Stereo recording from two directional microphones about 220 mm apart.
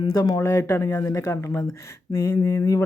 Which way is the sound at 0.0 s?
15° left (ahead or behind).